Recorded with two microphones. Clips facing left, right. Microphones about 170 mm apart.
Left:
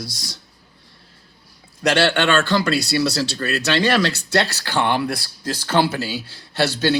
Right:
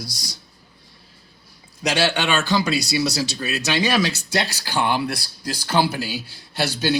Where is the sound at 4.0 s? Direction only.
60° left (ahead or behind).